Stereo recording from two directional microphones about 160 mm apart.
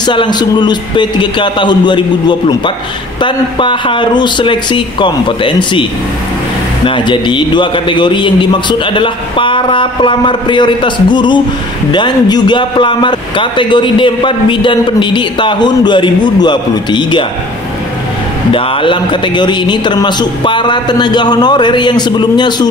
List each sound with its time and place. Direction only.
0.0 s a man's voice: 30° left (ahead or behind)
6.9 s a man's voice: 30° left (ahead or behind)
18.5 s a man's voice: 35° left (ahead or behind)